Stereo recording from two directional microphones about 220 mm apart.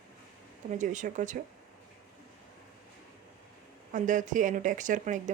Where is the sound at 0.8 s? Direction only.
35° right (ahead or behind).